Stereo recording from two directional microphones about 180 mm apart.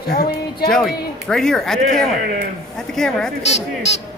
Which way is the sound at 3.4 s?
35° left (ahead or behind).